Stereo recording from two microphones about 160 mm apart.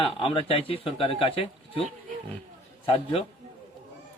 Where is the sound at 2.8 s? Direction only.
35° left (ahead or behind).